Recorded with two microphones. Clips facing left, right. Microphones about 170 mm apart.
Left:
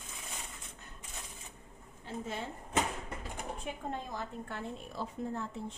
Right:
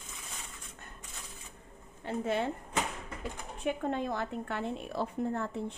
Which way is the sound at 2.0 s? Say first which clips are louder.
Right 8 dB; 65° right (ahead or behind).